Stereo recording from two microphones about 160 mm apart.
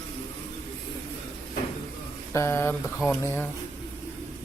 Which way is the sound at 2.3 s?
15° left (ahead or behind).